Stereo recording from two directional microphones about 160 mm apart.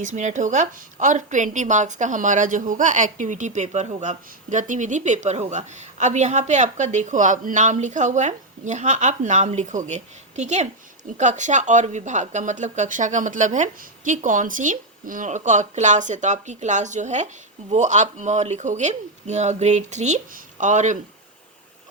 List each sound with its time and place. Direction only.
0.0 s a woman's voice: 50° right (ahead or behind)